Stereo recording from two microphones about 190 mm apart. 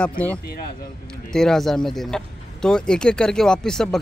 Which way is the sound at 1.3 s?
5° left (ahead or behind).